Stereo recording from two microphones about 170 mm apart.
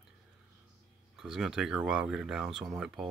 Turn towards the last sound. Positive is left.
turn(degrees=-5)  # may be behind; listen again after turning